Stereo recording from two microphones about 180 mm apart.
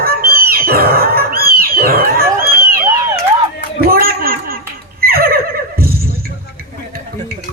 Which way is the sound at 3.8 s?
55° right (ahead or behind).